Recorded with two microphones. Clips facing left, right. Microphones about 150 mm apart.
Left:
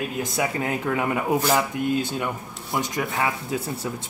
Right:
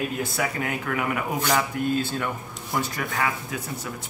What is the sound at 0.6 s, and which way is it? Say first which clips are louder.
Speech: left 3 dB; 30° left (ahead or behind).